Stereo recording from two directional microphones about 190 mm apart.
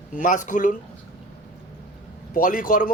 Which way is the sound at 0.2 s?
40° left (ahead or behind).